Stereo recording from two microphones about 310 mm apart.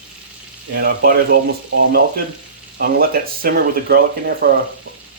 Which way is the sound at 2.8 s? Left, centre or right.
Right.